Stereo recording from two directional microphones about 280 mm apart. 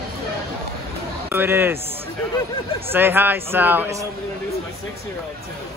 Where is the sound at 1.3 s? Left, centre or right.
Centre.